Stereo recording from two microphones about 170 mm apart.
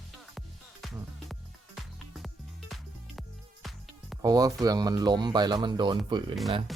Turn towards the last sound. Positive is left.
turn(degrees=-25)  # may be behind; listen again after turning